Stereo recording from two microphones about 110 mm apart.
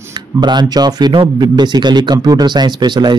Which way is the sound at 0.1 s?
40° right (ahead or behind).